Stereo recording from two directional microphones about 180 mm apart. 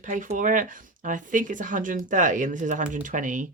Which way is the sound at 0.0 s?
45° right (ahead or behind).